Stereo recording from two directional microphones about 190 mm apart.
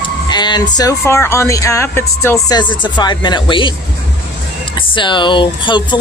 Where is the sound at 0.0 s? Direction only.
25° left (ahead or behind).